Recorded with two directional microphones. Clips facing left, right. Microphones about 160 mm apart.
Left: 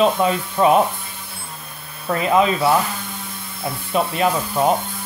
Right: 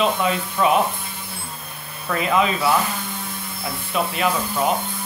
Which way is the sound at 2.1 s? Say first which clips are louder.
Left 3 dB; 30° left (ahead or behind).